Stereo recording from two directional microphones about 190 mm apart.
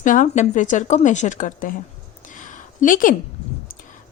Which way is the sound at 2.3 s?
40° left (ahead or behind).